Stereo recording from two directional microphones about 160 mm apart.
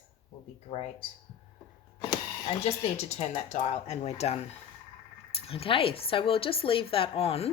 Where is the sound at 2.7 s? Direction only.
40° left (ahead or behind).